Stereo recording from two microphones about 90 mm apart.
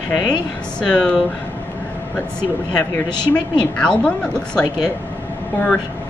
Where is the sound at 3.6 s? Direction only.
15° left (ahead or behind).